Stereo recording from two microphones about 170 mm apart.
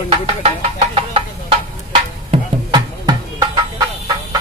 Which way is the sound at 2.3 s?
25° right (ahead or behind).